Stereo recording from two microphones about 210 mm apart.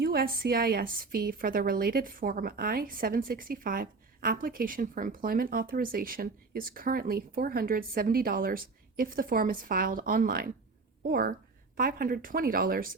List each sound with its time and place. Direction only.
0.0 s a woman's voice: 50° right (ahead or behind)